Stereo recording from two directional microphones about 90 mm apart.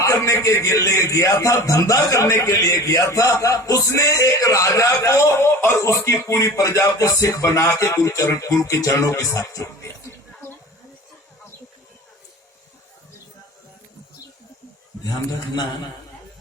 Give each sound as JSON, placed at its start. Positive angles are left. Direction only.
{"t": 0.0, "sound": "a man's voice", "side_deg": 35}